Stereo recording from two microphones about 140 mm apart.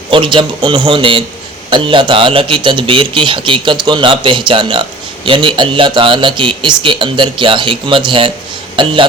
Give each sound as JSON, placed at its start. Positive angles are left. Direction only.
{"t": 0.1, "sound": "a man's voice", "side_deg": -35}